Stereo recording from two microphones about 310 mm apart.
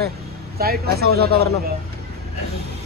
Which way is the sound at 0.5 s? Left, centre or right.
Right.